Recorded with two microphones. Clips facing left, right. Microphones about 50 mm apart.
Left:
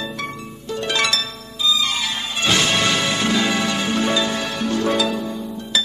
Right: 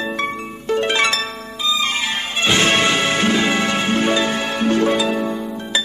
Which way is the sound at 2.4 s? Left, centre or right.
Right.